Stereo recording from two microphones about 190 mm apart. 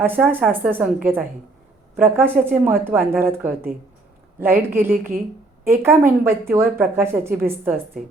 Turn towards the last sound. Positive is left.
turn(degrees=-10)  # may be behind; listen again after turning